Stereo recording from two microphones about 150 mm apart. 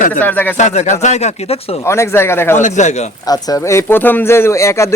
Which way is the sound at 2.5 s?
55° left (ahead or behind).